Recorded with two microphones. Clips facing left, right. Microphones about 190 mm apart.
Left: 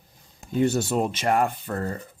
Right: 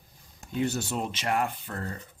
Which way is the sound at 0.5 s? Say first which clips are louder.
Left 7 dB; 50° left (ahead or behind).